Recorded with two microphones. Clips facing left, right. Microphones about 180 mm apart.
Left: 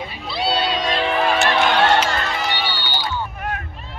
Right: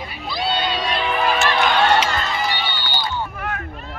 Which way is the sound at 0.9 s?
40° left (ahead or behind).